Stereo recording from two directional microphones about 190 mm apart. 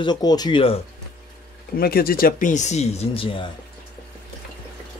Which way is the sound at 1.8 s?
50° left (ahead or behind).